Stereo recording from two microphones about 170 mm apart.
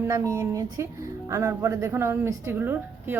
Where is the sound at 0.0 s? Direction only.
15° right (ahead or behind).